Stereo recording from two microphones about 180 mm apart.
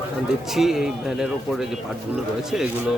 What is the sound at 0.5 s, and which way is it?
Speech, centre (ahead or behind).